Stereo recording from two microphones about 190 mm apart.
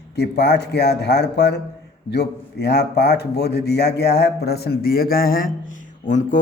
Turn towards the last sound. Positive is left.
turn(degrees=40)  # may be behind; listen again after turning